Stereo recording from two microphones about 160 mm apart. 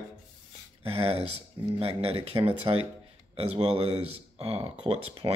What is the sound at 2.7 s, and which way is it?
Speech, 25° right (ahead or behind).